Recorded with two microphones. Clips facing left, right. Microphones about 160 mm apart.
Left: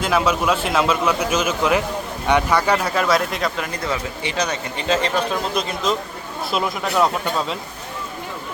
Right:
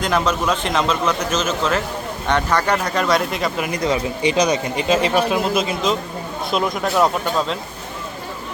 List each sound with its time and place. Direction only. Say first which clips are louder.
0.0 s a man's voice: even; 5° left (ahead or behind)
3.7 s speech: right 5 dB; 20° right (ahead or behind); by 7.1 s centre (ahead or behind)